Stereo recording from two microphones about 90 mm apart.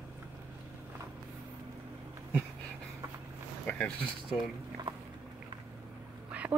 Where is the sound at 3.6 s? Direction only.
15° left (ahead or behind).